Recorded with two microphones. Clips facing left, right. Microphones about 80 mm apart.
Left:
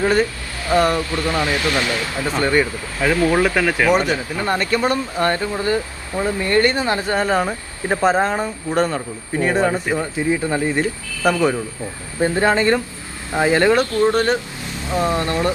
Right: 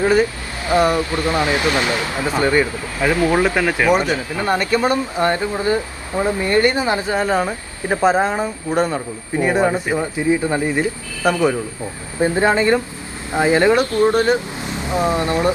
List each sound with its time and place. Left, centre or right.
0.0 s speech: centre
7.1 s speech: centre